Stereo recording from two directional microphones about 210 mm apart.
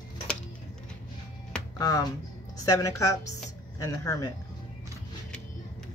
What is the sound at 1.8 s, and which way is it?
A woman's voice, 15° left (ahead or behind).